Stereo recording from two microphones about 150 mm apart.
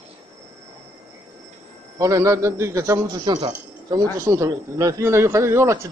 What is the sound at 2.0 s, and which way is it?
Speech, 20° right (ahead or behind).